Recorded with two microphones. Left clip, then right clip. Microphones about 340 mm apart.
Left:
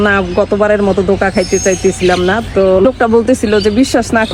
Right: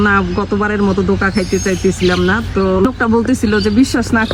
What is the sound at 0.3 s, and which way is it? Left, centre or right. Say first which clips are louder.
Speech: left 6 dB; centre.